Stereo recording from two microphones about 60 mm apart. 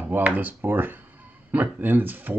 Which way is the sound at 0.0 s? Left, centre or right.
Right.